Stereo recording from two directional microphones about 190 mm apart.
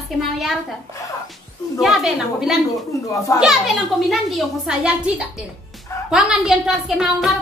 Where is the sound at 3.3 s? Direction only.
15° left (ahead or behind).